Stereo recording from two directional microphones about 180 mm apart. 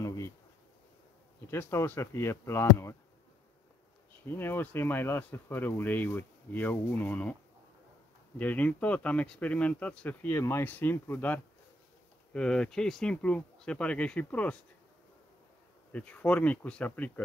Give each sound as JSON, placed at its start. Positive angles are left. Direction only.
{"t": 0.0, "sound": "bee", "side_deg": 20}
{"t": 1.5, "sound": "speech", "side_deg": 15}
{"t": 4.3, "sound": "speech", "side_deg": 10}
{"t": 8.4, "sound": "speech", "side_deg": 10}
{"t": 15.9, "sound": "speech", "side_deg": 5}